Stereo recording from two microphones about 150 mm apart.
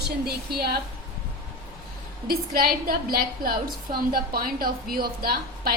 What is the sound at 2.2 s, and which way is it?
A woman's voice, 90° right.